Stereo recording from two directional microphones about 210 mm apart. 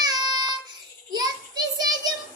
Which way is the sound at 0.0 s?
20° right (ahead or behind).